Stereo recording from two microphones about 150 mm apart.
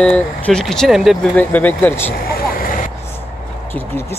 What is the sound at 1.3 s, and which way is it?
Speech, 10° left (ahead or behind).